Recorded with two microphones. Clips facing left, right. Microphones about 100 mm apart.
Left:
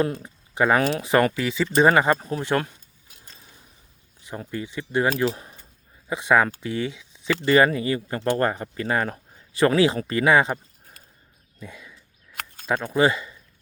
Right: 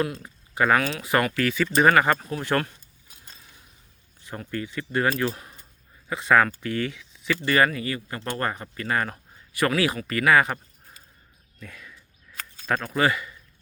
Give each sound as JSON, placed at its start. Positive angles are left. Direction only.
{"t": 0.5, "sound": "speech", "side_deg": 25}
{"t": 2.5, "sound": "speech", "side_deg": 15}
{"t": 4.2, "sound": "speech", "side_deg": 15}
{"t": 11.6, "sound": "a sound", "side_deg": 20}
{"t": 12.6, "sound": "speech", "side_deg": 15}